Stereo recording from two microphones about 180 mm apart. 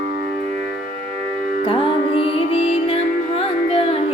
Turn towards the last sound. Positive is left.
turn(degrees=30)  # may be behind; listen again after turning